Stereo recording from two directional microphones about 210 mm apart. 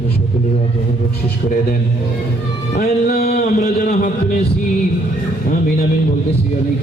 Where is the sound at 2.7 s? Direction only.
40° left (ahead or behind).